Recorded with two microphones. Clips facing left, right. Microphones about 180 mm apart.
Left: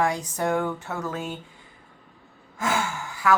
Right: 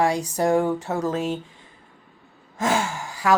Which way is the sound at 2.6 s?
35° right (ahead or behind).